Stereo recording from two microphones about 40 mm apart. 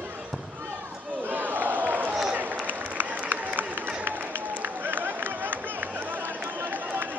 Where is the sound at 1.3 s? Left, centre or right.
Right.